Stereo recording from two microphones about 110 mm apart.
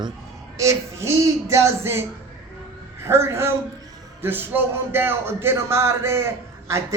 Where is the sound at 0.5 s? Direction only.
30° right (ahead or behind).